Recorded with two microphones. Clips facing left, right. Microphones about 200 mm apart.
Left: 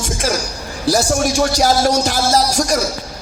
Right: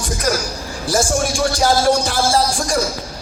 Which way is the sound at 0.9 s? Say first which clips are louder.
Left 3 dB; 35° left (ahead or behind).